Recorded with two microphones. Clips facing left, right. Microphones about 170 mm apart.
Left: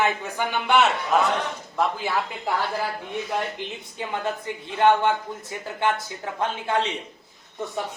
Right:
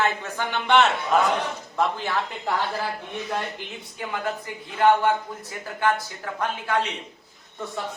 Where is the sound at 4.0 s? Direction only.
25° left (ahead or behind).